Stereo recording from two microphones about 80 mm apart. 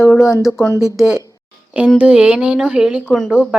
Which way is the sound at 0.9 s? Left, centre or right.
Centre.